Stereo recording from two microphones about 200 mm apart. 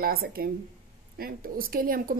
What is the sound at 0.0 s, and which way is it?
A woman's voice, 50° right (ahead or behind).